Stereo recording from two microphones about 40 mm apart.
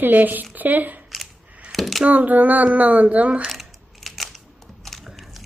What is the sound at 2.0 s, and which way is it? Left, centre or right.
A woman's voice, right.